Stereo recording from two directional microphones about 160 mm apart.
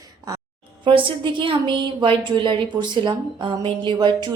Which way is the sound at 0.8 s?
30° right (ahead or behind).